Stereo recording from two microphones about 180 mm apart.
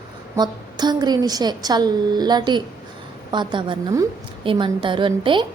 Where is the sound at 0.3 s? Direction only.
25° right (ahead or behind).